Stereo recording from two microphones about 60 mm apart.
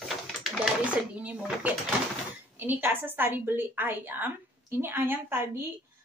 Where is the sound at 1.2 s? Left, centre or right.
Right.